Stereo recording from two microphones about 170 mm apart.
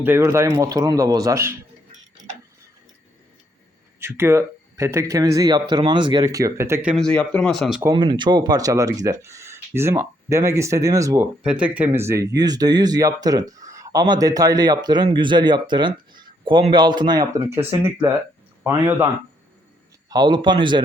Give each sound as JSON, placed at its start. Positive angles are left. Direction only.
{"t": 0.0, "sound": "speech", "side_deg": -15}
{"t": 4.0, "sound": "speech", "side_deg": -15}
{"t": 6.9, "sound": "speech", "side_deg": 5}
{"t": 7.8, "sound": "speech", "side_deg": -25}
{"t": 11.4, "sound": "a man's voice", "side_deg": -5}
{"t": 17.5, "sound": "speech", "side_deg": -15}
{"t": 20.1, "sound": "speech", "side_deg": -25}